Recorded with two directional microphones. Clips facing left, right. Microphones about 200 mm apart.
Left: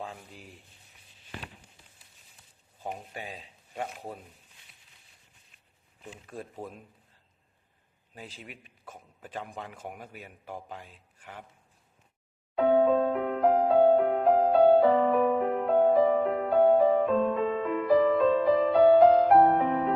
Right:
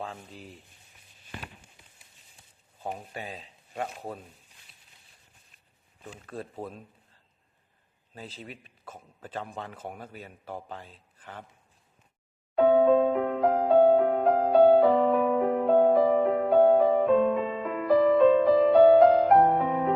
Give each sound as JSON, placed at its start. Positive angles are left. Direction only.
{"t": 0.0, "sound": "speech", "side_deg": 15}
{"t": 6.1, "sound": "a man's voice", "side_deg": 10}
{"t": 8.1, "sound": "a man's voice", "side_deg": 15}
{"t": 12.7, "sound": "music", "side_deg": 0}